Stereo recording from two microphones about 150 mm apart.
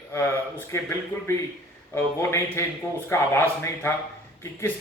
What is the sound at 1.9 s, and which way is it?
A man's voice, 15° left (ahead or behind).